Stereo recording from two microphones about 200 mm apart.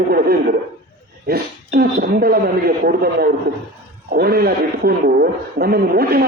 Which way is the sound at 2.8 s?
50° right (ahead or behind).